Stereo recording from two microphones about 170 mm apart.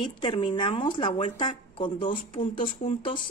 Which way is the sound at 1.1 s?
40° left (ahead or behind).